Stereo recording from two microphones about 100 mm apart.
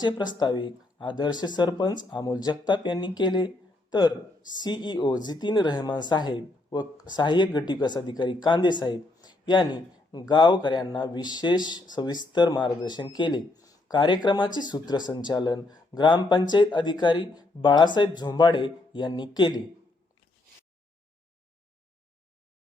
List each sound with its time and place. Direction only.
0.0 s speech: 45° left (ahead or behind)